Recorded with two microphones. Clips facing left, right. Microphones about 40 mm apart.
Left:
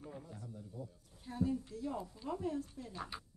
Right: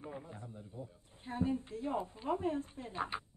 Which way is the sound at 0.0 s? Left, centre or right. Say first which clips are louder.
Right 3 dB; right.